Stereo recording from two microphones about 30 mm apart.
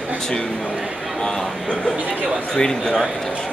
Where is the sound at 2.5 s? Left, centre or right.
Centre.